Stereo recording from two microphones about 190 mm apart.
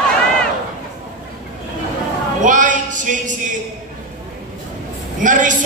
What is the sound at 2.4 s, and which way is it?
Music, 45° right (ahead or behind).